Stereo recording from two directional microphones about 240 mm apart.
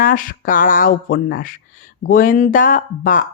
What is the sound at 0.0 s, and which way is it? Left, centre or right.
Speech, left.